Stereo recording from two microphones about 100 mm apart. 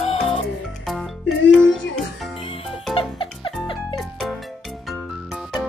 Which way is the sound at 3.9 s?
Centre (ahead or behind).